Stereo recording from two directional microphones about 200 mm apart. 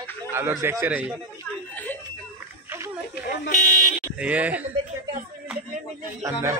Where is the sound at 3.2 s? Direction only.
45° left (ahead or behind).